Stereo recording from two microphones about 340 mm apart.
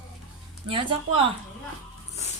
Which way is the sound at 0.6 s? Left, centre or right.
Centre.